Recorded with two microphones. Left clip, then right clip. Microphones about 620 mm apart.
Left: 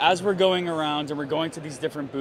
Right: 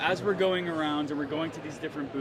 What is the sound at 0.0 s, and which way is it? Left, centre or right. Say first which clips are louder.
Speech: left 6 dB; left.